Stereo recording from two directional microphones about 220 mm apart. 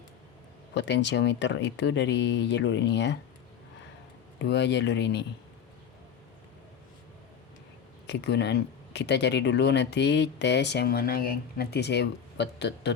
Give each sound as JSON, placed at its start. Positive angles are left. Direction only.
{"t": 0.7, "sound": "speech", "side_deg": 55}
{"t": 4.4, "sound": "speech", "side_deg": 55}
{"t": 8.0, "sound": "speech", "side_deg": 50}